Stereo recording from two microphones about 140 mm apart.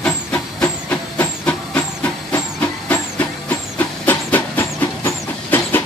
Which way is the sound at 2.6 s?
10° left (ahead or behind).